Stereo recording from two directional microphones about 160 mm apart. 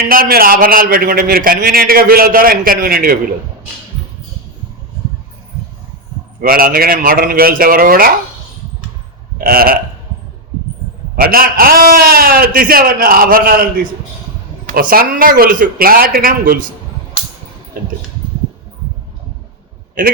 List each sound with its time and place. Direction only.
0.1 s a man's voice: 65° right (ahead or behind)
6.4 s a man's voice: 65° right (ahead or behind)
9.4 s a man's voice: 65° right (ahead or behind)
11.2 s a man's voice: 65° right (ahead or behind)
14.7 s a man's voice: 60° right (ahead or behind)